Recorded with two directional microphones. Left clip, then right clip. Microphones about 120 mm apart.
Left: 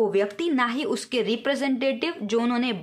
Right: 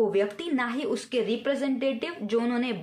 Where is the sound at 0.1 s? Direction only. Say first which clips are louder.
Left 3 dB; 30° left (ahead or behind).